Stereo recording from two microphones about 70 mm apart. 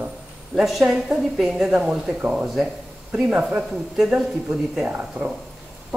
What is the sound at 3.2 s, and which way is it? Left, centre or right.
Speech, centre.